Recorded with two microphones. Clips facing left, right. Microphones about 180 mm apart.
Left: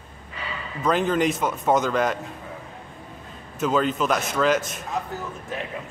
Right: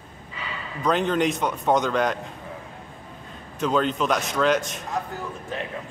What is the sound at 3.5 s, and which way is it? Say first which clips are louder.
A man's voice: left 1 dB; 5° left (ahead or behind).